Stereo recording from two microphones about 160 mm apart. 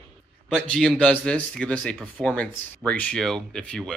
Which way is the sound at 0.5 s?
5° left (ahead or behind).